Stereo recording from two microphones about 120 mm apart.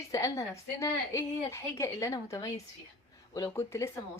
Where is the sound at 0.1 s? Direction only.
30° left (ahead or behind).